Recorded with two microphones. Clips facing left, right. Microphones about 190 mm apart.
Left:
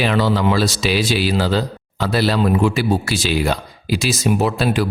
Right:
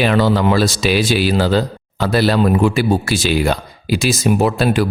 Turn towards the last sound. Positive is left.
turn(degrees=-50)  # may be behind; listen again after turning